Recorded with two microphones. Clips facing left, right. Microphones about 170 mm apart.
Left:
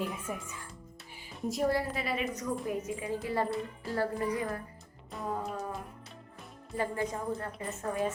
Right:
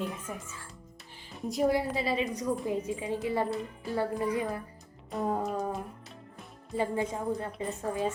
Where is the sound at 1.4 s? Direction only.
Centre (ahead or behind).